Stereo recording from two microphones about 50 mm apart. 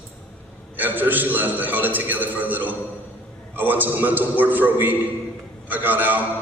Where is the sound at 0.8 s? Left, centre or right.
Right.